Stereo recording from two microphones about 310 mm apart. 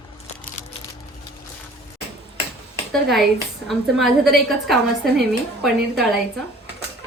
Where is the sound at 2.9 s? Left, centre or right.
Centre.